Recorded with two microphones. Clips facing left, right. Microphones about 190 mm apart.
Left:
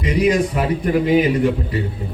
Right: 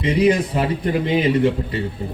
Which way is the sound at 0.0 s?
25° right (ahead or behind).